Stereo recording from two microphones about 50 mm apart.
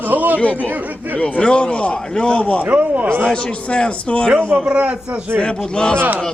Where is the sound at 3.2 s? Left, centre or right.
Centre.